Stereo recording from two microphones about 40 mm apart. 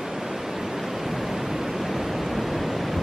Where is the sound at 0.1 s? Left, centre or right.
Centre.